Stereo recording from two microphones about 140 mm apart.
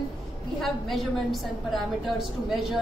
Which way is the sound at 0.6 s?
Centre (ahead or behind).